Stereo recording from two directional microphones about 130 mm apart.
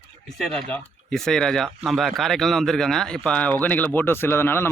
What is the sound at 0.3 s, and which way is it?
Speech, centre (ahead or behind).